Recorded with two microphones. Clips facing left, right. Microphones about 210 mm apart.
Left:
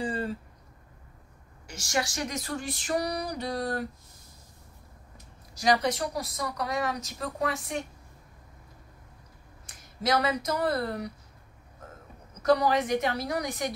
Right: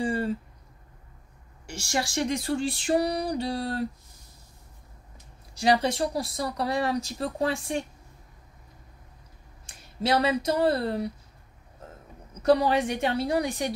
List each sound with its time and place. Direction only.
0.0 s a sound: 25° right (ahead or behind)
1.7 s speech: 30° right (ahead or behind)
5.5 s speech: 30° right (ahead or behind)
9.7 s speech: 30° right (ahead or behind)
12.4 s speech: 30° right (ahead or behind)